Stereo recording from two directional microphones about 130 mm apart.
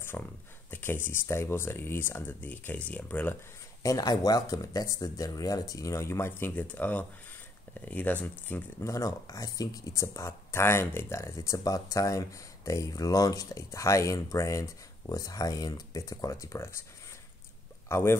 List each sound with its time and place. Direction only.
0.0 s speech: 15° left (ahead or behind)
3.8 s speech: 30° left (ahead or behind)
17.8 s speech: 20° left (ahead or behind)